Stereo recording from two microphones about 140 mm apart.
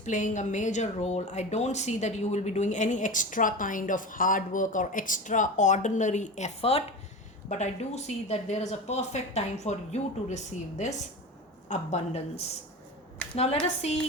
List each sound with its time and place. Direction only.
0.0 s a woman's voice: 60° left (ahead or behind)